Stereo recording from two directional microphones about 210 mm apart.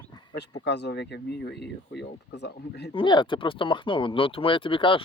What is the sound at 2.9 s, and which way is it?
Speech, 25° left (ahead or behind).